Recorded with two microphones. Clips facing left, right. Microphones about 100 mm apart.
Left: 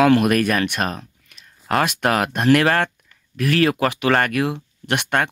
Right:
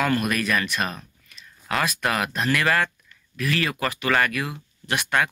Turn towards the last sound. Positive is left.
turn(degrees=55)  # may be behind; listen again after turning